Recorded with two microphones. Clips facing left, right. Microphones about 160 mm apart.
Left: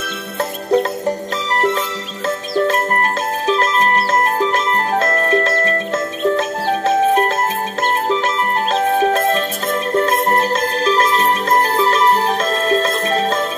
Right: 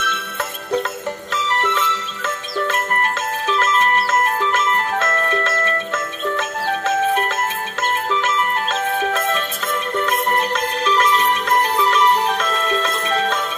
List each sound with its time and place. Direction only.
0.7 s music: 40° left (ahead or behind)
8.7 s music: 35° left (ahead or behind)